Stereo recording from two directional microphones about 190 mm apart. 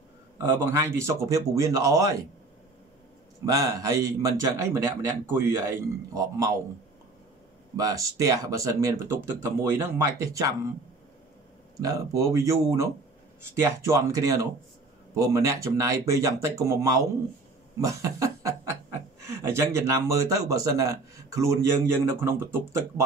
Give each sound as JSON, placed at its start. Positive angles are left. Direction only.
{"t": 0.4, "sound": "a man's voice", "side_deg": -15}
{"t": 3.5, "sound": "a man's voice", "side_deg": -15}
{"t": 7.7, "sound": "a man's voice", "side_deg": -20}
{"t": 11.7, "sound": "a man's voice", "side_deg": -20}